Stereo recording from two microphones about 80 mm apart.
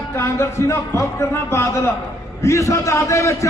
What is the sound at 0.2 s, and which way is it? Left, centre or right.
A man's voice, left.